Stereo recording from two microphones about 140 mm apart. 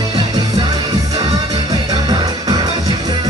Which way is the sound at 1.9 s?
30° right (ahead or behind).